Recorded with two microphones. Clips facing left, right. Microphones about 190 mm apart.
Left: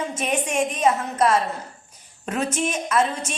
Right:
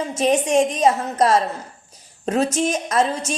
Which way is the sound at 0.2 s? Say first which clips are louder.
Right 8 dB; 35° right (ahead or behind).